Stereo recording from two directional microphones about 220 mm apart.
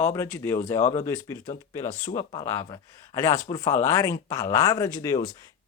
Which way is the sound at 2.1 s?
15° left (ahead or behind).